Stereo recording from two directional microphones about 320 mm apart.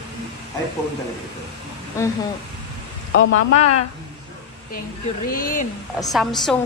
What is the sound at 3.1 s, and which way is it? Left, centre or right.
Speech, left.